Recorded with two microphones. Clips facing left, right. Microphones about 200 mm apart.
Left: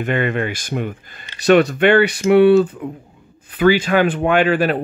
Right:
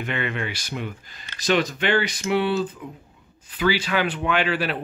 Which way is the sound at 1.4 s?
65° left (ahead or behind).